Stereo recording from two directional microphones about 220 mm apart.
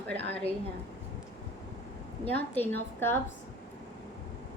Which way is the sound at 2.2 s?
10° left (ahead or behind).